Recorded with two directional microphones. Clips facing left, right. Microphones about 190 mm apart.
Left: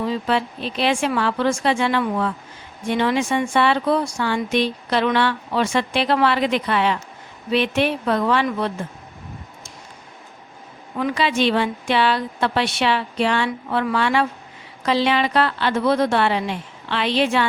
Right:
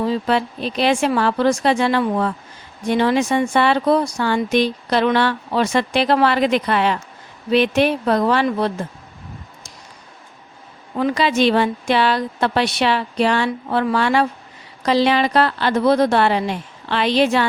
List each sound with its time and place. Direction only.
0.0 s a woman's voice: 40° right (ahead or behind)
10.9 s a woman's voice: 40° right (ahead or behind)